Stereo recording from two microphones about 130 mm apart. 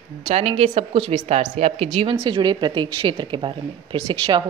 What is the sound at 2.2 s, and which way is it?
A woman's voice, 35° right (ahead or behind).